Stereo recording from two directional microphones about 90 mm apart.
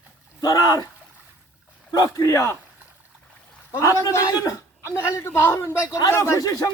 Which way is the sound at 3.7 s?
35° left (ahead or behind).